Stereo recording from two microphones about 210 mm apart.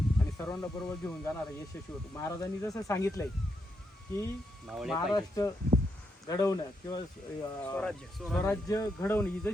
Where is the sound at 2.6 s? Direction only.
15° left (ahead or behind).